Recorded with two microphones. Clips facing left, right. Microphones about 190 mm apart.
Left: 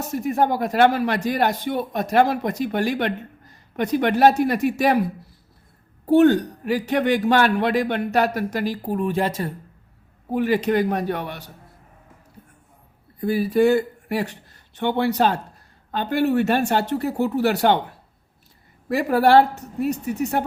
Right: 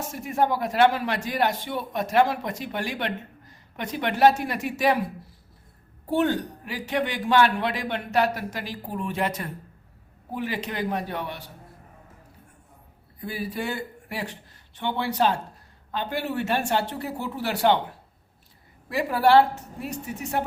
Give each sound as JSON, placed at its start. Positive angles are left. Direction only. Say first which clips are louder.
{"t": 0.1, "sound": "a man's voice", "louder": "left 4 dB", "side_deg": 40}
{"t": 6.7, "sound": "a man's voice", "louder": "left 8 dB", "side_deg": 45}
{"t": 10.3, "sound": "a man's voice", "louder": "left 10 dB", "side_deg": 50}
{"t": 13.2, "sound": "speech", "louder": "left 13 dB", "side_deg": 45}
{"t": 18.9, "sound": "speech", "louder": "left 4 dB", "side_deg": 45}